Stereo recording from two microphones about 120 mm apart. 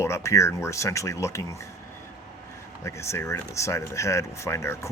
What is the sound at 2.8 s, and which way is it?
Speech, 25° left (ahead or behind).